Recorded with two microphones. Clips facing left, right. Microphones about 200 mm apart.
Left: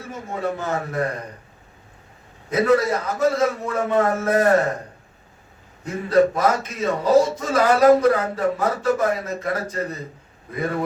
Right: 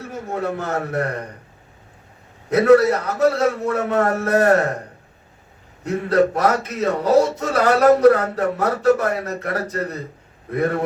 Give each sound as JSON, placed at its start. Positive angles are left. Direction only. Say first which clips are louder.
{"t": 0.1, "sound": "a man's voice", "louder": "right 1 dB", "side_deg": -65}
{"t": 2.5, "sound": "speech", "louder": "right 5 dB", "side_deg": -65}
{"t": 5.8, "sound": "speech", "louder": "even", "side_deg": -65}